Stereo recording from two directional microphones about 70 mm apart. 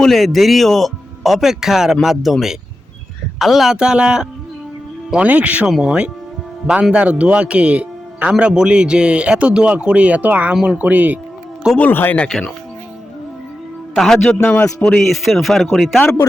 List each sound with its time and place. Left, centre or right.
0.0 s a man's voice: centre
5.6 s a man's voice: centre
10.5 s a man's voice: centre
10.8 s speech: right
11.8 s speech: left
12.3 s speech: centre
14.4 s speech: centre
15.1 s speech: centre